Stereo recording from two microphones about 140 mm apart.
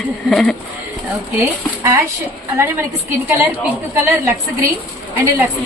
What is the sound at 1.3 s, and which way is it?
A woman's voice, 20° right (ahead or behind).